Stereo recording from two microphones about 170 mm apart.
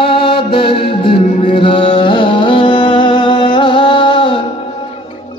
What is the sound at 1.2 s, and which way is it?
Music, 45° left (ahead or behind).